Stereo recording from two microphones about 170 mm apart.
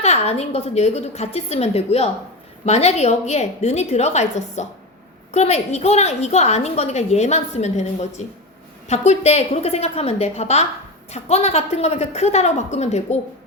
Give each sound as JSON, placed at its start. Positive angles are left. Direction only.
{"t": 0.0, "sound": "a woman's voice", "side_deg": 40}